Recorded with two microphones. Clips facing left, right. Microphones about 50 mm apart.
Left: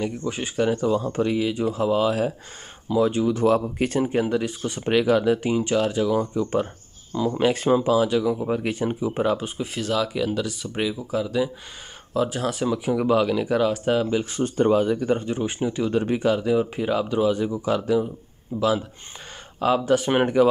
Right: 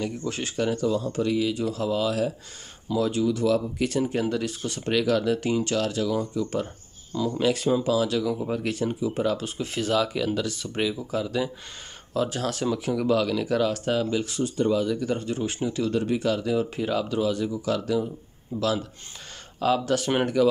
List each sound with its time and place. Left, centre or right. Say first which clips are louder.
0.0 s speech: left 2 dB; centre
0.7 s speech: left 3 dB; left
9.8 s speech: even; centre
14.3 s speech: left 6 dB; left